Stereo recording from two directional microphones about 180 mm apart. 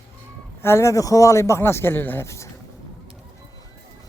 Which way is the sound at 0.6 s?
15° left (ahead or behind).